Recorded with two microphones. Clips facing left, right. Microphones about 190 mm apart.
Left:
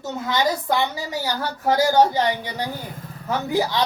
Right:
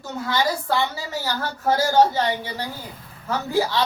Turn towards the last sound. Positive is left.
turn(degrees=15)  # may be behind; listen again after turning